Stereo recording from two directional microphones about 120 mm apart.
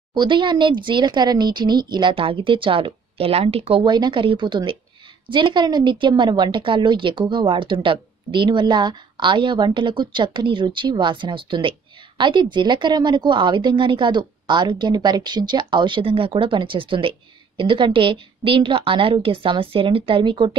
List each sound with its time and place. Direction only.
0.1 s a woman's voice: 40° right (ahead or behind)
3.8 s a woman's voice: 40° right (ahead or behind)